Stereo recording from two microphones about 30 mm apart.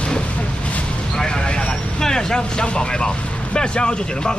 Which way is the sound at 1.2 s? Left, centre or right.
Left.